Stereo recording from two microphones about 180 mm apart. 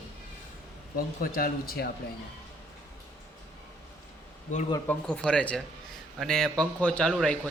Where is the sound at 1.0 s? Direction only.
55° left (ahead or behind).